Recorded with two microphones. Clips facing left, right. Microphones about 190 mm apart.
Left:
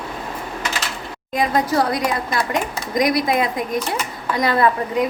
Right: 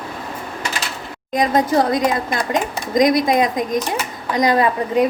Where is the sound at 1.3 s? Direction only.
20° right (ahead or behind).